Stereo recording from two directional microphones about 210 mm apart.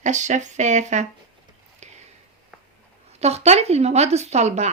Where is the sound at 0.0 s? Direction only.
35° right (ahead or behind).